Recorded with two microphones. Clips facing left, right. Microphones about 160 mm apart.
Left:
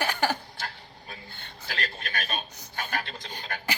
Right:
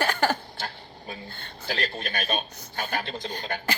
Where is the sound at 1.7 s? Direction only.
30° right (ahead or behind).